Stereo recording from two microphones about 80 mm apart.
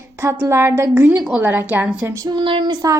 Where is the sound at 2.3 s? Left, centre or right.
Right.